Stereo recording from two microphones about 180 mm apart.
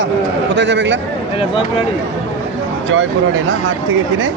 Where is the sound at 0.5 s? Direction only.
80° right.